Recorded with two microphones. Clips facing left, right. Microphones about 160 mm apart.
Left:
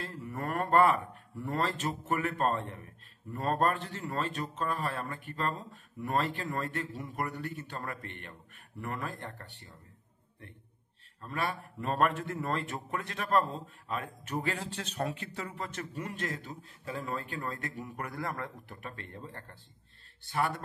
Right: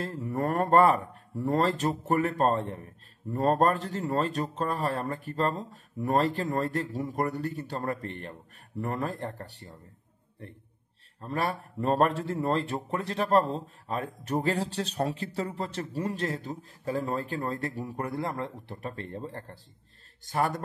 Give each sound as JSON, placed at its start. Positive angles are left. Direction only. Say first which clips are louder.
{"t": 0.0, "sound": "speech", "louder": "right 8 dB", "side_deg": -40}